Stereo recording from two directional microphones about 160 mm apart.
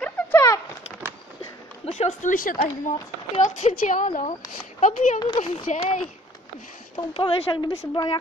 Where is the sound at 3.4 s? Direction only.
50° left (ahead or behind).